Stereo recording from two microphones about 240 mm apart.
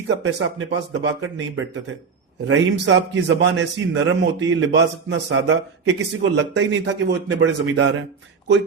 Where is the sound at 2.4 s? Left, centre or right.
Right.